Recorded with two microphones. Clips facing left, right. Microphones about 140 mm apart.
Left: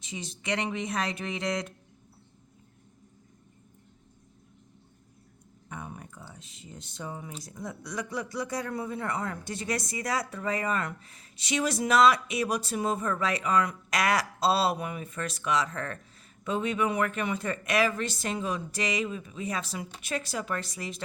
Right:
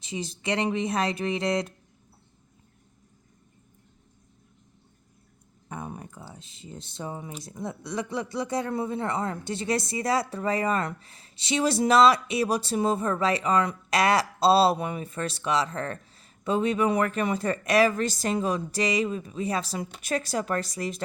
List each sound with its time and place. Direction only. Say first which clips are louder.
0.0 s speech: right 6 dB; 35° right (ahead or behind)
5.6 s speech: right 4 dB; 35° right (ahead or behind)